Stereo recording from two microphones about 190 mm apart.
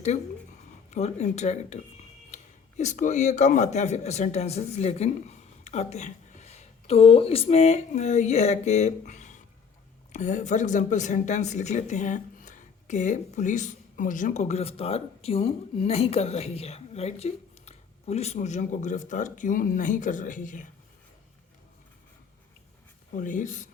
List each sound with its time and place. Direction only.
0.9 s a man's voice: 35° left (ahead or behind)
23.1 s speech: 40° left (ahead or behind)